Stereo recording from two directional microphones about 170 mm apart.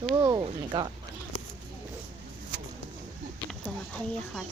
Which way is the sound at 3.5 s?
5° left (ahead or behind).